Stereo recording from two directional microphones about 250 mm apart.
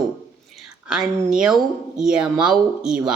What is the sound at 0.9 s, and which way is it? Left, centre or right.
A woman's voice, centre.